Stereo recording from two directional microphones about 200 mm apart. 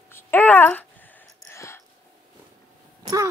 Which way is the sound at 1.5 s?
15° left (ahead or behind).